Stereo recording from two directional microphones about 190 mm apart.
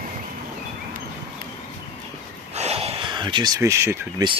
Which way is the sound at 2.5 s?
35° right (ahead or behind).